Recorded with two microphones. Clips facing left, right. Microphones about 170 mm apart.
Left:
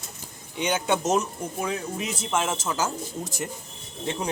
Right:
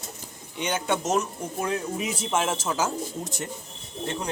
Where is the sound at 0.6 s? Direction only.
10° left (ahead or behind).